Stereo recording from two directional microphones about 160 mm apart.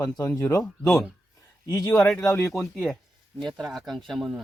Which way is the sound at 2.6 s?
Centre (ahead or behind).